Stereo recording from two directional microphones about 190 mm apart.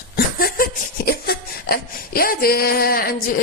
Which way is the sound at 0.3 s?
50° left (ahead or behind).